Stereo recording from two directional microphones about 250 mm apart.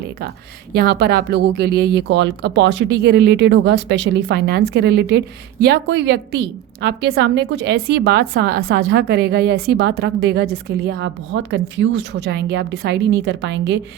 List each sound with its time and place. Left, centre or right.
0.7 s a woman's voice: right